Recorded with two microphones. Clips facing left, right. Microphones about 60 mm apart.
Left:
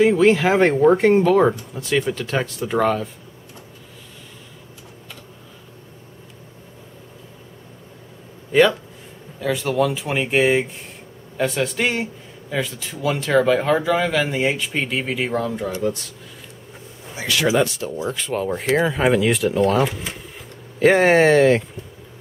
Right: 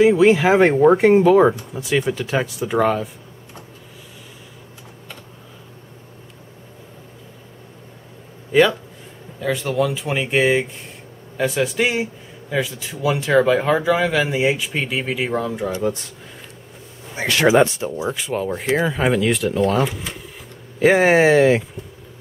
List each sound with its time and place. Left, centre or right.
0.0 s speech: centre
8.5 s speech: centre
15.7 s speech: right
17.1 s speech: right
17.6 s speech: right
17.9 s speech: centre